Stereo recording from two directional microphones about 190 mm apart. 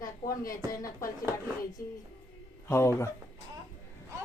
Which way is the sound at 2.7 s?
15° left (ahead or behind).